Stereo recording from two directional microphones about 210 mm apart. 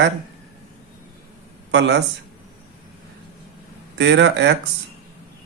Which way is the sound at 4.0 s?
55° right (ahead or behind).